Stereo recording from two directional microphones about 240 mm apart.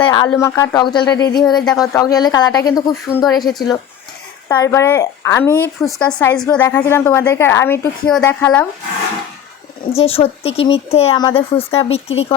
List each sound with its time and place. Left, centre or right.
0.0 s a woman's voice: centre
3.2 s speech: centre
4.4 s a woman's voice: centre
9.9 s speech: left